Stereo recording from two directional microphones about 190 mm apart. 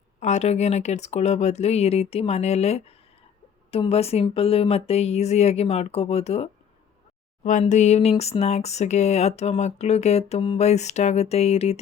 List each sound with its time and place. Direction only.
0.2 s speech: 35° left (ahead or behind)